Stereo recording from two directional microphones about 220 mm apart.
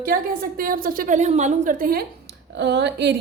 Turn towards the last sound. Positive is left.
turn(degrees=-50)  # may be behind; listen again after turning